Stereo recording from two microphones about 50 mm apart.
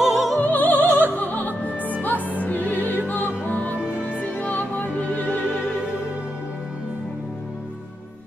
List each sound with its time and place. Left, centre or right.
0.0 s music: centre
0.4 s opera: left
3.1 s music: left